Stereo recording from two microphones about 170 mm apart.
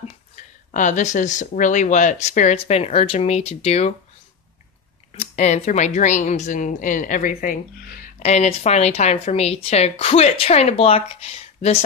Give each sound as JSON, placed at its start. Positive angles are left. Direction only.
{"t": 0.7, "sound": "speech", "side_deg": 50}
{"t": 5.2, "sound": "speech", "side_deg": 45}
{"t": 8.2, "sound": "a woman's voice", "side_deg": 40}